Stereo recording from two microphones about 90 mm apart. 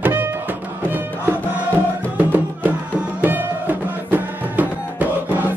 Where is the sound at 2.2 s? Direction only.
20° right (ahead or behind).